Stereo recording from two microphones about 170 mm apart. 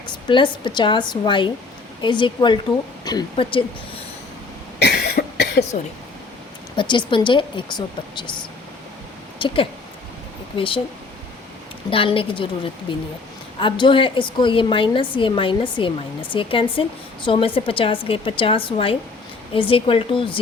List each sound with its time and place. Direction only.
0.3 s a woman's voice: 30° left (ahead or behind)
4.8 s cough: 70° left (ahead or behind)
6.7 s a woman's voice: 30° left (ahead or behind)
11.9 s a woman's voice: 30° left (ahead or behind)